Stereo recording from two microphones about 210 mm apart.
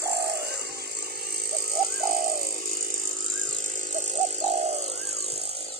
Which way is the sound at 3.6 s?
35° right (ahead or behind).